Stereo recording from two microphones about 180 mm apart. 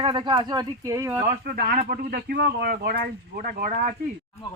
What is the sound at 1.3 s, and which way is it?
Speech, 55° right (ahead or behind).